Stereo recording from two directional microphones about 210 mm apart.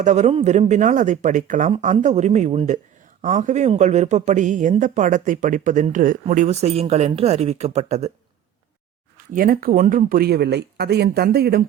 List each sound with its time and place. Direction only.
0.0 s a man's voice: 35° right (ahead or behind)
9.1 s speech: 40° right (ahead or behind)